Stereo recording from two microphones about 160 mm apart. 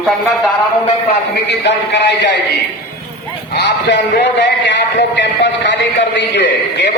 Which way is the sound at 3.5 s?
90° left.